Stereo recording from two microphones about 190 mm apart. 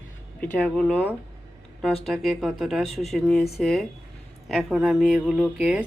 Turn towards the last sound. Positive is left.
turn(degrees=-5)  # may be behind; listen again after turning